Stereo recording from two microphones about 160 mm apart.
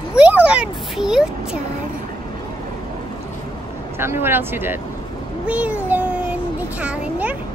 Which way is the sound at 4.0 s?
15° right (ahead or behind).